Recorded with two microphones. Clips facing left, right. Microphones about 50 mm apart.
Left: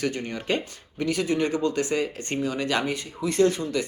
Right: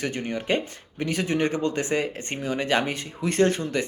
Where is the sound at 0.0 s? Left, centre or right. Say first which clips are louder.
Even; right.